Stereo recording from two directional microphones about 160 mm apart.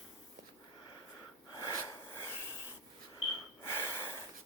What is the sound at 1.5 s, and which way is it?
Wheeze, 25° left (ahead or behind).